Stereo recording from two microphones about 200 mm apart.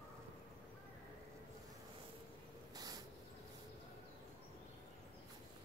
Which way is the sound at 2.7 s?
20° right (ahead or behind).